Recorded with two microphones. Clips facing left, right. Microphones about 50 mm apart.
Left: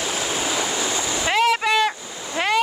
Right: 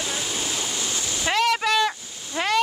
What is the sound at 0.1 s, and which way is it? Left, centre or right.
Stream, left.